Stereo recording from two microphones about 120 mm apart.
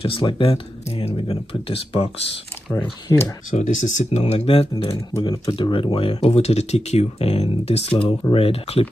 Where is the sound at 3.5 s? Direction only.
90° left; by 4.7 s 55° left (ahead or behind).